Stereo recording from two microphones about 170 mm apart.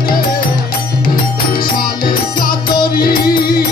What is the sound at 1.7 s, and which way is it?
Music, 60° left (ahead or behind).